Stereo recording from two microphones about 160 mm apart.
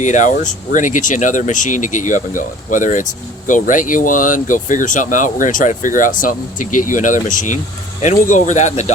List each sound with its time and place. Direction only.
0.0 s speech: 50° left (ahead or behind)